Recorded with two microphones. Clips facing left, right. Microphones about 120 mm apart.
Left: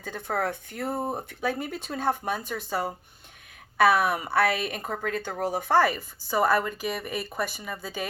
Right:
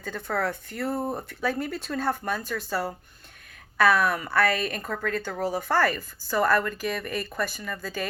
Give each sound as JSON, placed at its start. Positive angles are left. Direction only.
{"t": 0.0, "sound": "speech", "side_deg": 10}
{"t": 4.4, "sound": "a woman's voice", "side_deg": 5}